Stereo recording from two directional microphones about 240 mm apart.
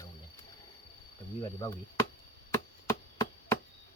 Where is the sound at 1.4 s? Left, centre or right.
Centre.